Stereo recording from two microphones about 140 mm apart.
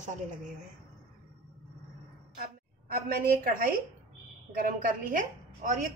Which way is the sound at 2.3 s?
90° right.